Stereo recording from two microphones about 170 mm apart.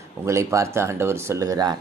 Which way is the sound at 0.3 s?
15° right (ahead or behind).